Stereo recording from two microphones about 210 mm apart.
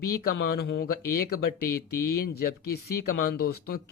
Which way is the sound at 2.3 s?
50° left (ahead or behind).